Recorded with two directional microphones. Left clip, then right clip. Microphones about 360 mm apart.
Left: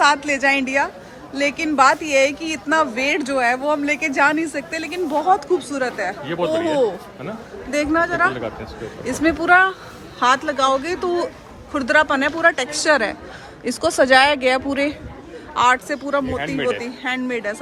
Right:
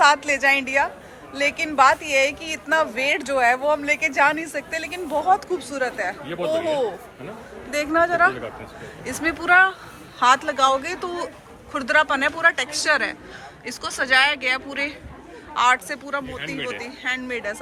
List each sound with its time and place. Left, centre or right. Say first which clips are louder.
0.0 s speech: left 1 dB; centre
6.2 s speech: left 5 dB; left
6.5 s speech: left 3 dB; centre
16.4 s speech: left 5 dB; left
16.8 s speech: left 3 dB; centre